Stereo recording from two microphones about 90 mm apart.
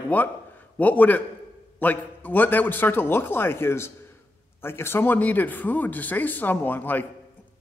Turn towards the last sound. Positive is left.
turn(degrees=20)  # may be behind; listen again after turning